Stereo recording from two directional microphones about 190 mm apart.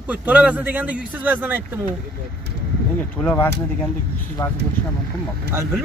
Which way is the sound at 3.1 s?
10° left (ahead or behind).